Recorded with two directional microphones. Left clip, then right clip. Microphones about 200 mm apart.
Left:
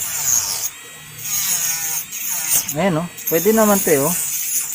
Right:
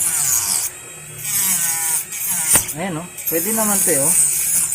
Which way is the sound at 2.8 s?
55° left (ahead or behind).